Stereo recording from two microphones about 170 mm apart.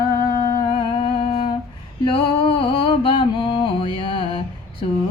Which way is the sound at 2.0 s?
30° left (ahead or behind).